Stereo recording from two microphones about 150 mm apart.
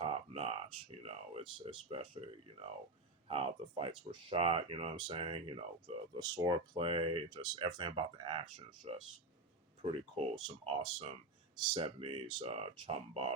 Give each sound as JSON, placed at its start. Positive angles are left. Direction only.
{"t": 0.0, "sound": "speech", "side_deg": -40}
{"t": 3.2, "sound": "speech", "side_deg": -40}
{"t": 6.1, "sound": "speech", "side_deg": -25}
{"t": 9.8, "sound": "speech", "side_deg": -40}